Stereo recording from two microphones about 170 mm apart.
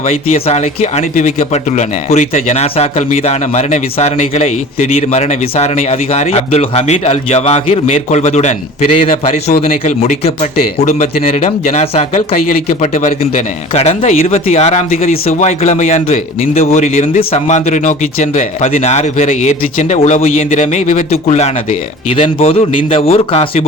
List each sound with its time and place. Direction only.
0.0 s speech: 35° left (ahead or behind)
9.8 s a man's voice: 45° left (ahead or behind)